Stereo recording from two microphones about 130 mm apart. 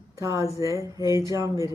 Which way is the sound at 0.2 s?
25° right (ahead or behind).